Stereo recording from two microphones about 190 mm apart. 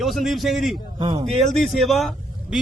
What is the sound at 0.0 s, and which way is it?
Speech, centre (ahead or behind).